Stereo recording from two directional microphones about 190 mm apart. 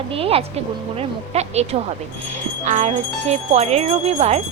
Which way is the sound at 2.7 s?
35° right (ahead or behind).